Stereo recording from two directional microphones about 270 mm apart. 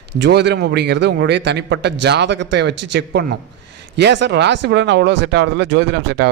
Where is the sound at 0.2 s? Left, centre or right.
Right.